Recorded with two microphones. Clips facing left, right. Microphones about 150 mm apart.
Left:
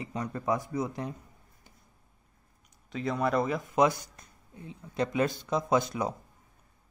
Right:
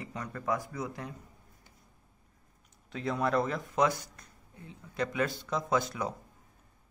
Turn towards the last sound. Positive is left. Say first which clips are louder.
# left 3 dB
turn(degrees=20)  # may be behind; listen again after turning